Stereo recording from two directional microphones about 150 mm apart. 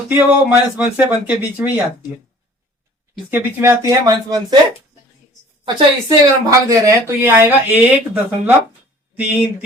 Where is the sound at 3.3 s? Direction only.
15° right (ahead or behind).